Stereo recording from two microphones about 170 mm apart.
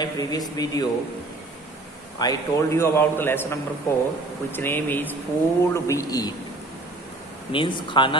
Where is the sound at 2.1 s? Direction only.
20° left (ahead or behind).